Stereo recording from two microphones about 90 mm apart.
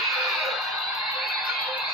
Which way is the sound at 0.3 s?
Centre (ahead or behind).